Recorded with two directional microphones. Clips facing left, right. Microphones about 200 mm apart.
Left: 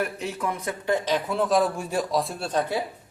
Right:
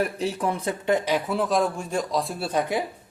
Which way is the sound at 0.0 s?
35° right (ahead or behind).